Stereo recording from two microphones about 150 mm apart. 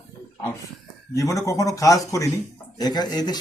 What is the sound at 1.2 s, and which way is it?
Speech, 20° left (ahead or behind).